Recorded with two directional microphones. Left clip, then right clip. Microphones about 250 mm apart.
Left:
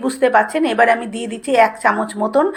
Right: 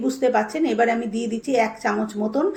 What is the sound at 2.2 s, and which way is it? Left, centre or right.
Speech, centre.